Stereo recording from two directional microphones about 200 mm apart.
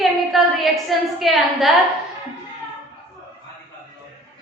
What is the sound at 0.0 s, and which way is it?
A woman's voice, centre (ahead or behind).